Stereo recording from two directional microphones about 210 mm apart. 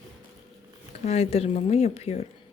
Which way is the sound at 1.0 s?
30° left (ahead or behind).